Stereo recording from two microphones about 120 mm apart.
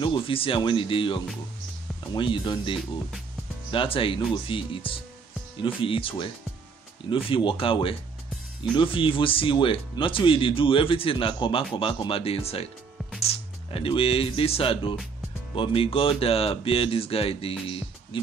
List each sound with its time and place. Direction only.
0.0 s speech: 45° left (ahead or behind)
3.7 s speech: 50° left (ahead or behind)